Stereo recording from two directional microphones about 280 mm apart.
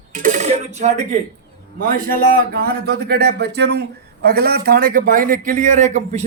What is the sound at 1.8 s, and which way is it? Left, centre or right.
A man's voice, right.